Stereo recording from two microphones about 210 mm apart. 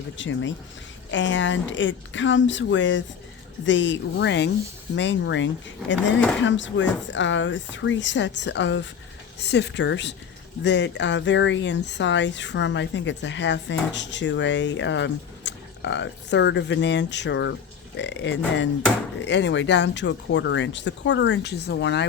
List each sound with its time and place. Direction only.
0.2 s speech: 60° left (ahead or behind)